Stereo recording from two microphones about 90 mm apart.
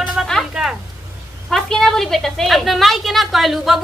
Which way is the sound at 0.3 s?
Centre (ahead or behind).